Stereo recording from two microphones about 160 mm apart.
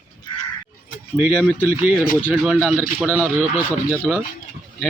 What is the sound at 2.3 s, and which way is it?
Speech, 5° right (ahead or behind).